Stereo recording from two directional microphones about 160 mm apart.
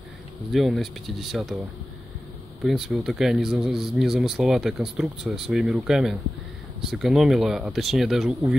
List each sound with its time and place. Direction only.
0.5 s speech: centre (ahead or behind)
2.6 s speech: centre (ahead or behind)